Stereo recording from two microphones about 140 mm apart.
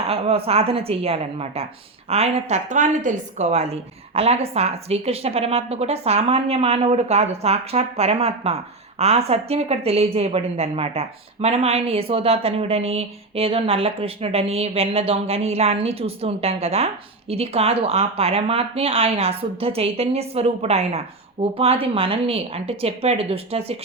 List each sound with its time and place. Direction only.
0.1 s a woman's voice: 45° right (ahead or behind)